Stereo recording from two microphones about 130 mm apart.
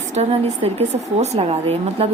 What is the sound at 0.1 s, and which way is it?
Speech, 55° right (ahead or behind).